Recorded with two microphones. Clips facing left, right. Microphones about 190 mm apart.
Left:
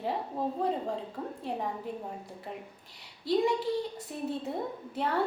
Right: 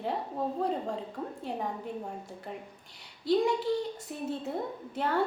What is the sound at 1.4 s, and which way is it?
Speech, centre (ahead or behind).